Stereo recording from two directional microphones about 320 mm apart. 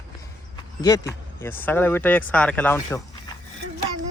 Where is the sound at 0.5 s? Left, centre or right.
Centre.